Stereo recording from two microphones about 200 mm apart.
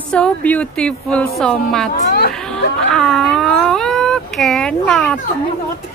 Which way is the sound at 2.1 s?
50° left (ahead or behind).